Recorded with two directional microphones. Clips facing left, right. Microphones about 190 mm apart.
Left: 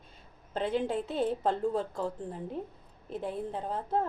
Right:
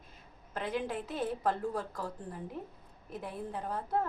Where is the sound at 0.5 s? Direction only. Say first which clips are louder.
Left 5 dB; 30° left (ahead or behind).